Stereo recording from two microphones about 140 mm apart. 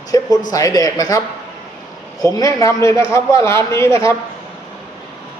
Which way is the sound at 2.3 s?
25° left (ahead or behind).